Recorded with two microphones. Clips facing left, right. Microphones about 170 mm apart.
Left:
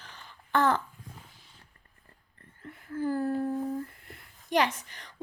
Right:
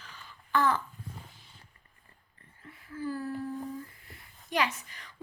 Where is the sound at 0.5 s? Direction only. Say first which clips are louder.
Left 2 dB; 50° left (ahead or behind).